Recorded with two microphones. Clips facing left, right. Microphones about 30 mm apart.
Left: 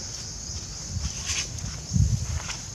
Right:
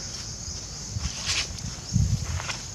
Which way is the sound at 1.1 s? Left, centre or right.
Right.